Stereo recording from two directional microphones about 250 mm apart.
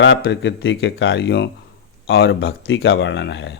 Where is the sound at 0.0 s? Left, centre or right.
Left.